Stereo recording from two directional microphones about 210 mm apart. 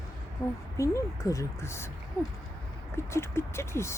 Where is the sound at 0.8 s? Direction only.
15° left (ahead or behind).